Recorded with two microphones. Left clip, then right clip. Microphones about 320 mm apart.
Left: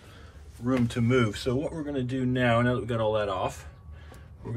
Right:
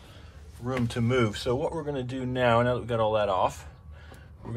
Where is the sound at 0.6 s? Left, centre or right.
Centre.